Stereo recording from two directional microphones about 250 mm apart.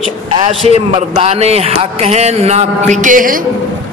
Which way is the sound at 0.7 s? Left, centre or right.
Right.